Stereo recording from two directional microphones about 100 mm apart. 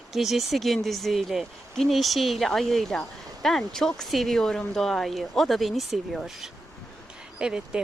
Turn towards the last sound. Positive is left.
turn(degrees=-5)  # may be behind; listen again after turning